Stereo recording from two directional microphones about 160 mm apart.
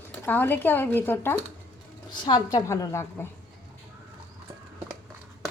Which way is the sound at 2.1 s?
25° left (ahead or behind).